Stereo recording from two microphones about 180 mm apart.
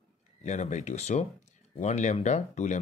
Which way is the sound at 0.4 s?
40° left (ahead or behind).